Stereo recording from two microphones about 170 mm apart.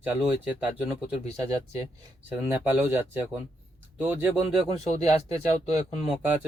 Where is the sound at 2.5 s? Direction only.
10° right (ahead or behind).